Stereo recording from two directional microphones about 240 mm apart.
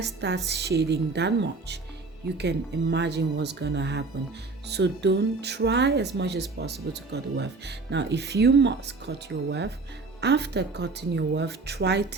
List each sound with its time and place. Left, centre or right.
0.0 s speech: right